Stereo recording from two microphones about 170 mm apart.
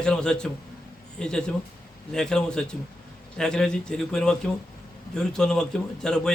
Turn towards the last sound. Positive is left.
turn(degrees=5)  # may be behind; listen again after turning